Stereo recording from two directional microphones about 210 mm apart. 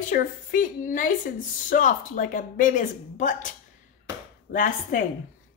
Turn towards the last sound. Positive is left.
turn(degrees=40)  # may be behind; listen again after turning